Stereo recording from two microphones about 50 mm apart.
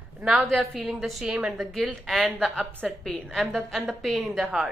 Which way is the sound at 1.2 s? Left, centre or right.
Centre.